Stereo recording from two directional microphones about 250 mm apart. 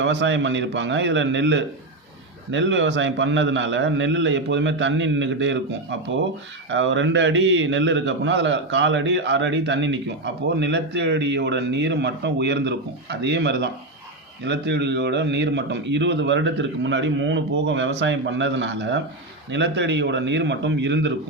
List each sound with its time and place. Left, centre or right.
0.0 s a man's voice: right